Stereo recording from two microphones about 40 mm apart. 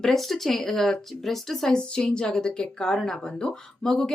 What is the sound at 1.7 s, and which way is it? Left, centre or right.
Speech, left.